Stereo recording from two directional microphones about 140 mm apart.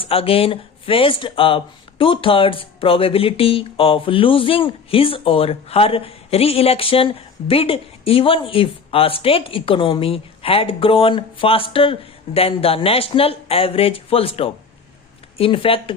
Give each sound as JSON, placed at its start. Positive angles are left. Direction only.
{"t": 0.0, "sound": "speech", "side_deg": 40}